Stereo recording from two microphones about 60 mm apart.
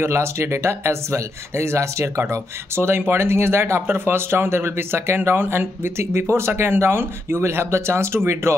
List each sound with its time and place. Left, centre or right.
0.0 s speech: right